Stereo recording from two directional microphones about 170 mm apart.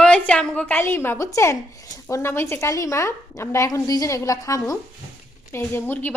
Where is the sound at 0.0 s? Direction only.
5° left (ahead or behind).